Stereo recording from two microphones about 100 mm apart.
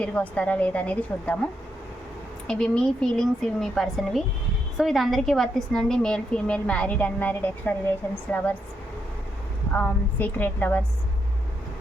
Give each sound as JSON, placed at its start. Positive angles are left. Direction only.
{"t": 0.0, "sound": "a woman's voice", "side_deg": 15}
{"t": 2.5, "sound": "a woman's voice", "side_deg": 10}
{"t": 9.7, "sound": "a woman's voice", "side_deg": 15}